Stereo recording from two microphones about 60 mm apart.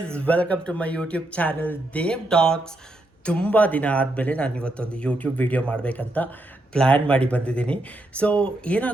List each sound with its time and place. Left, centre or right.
0.0 s a man's voice: left